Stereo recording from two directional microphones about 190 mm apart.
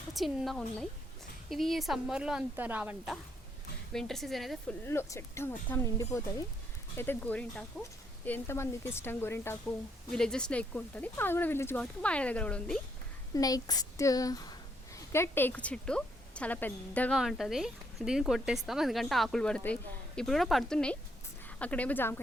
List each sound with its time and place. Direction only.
0.1 s speech: centre (ahead or behind)
4.9 s speech: 15° left (ahead or behind)
13.3 s a woman's voice: 20° left (ahead or behind)